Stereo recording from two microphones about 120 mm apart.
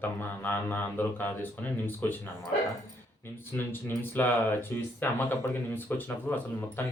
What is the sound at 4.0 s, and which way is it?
Speech, 15° left (ahead or behind).